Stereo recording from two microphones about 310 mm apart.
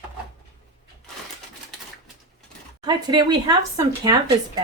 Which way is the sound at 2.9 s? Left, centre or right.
Centre.